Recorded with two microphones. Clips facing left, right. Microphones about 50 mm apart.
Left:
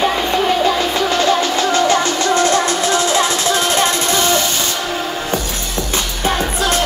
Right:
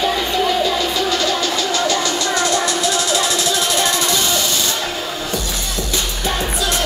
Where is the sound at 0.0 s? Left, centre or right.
Left.